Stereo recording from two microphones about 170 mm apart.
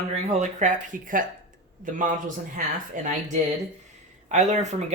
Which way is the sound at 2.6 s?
45° right (ahead or behind).